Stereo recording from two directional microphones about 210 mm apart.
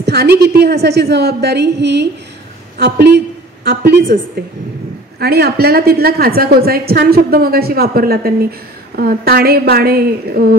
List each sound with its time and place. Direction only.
0.0 s a woman's voice: 50° right (ahead or behind)
3.6 s a woman's voice: 50° right (ahead or behind)
5.2 s a woman's voice: 50° right (ahead or behind)